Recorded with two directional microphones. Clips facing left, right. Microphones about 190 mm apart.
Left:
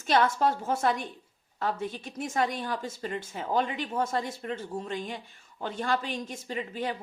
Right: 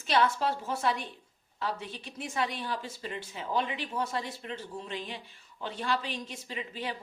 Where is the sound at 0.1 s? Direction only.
45° left (ahead or behind).